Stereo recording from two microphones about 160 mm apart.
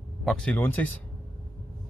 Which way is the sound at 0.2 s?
Centre (ahead or behind).